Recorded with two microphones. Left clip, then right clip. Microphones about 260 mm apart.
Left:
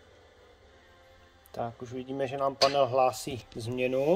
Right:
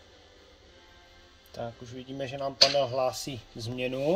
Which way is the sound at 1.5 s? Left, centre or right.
Centre.